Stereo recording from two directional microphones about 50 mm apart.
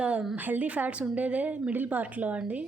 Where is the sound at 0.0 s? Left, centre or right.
Right.